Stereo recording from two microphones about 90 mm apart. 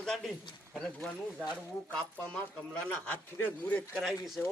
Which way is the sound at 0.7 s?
5° left (ahead or behind).